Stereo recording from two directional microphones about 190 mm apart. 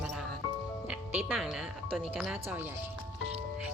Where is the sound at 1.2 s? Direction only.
5° right (ahead or behind).